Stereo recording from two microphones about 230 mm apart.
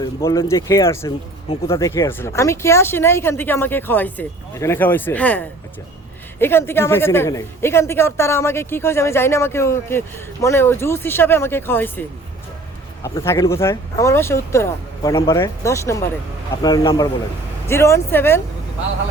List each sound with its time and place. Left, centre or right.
0.0 s speech: centre
6.4 s speech: centre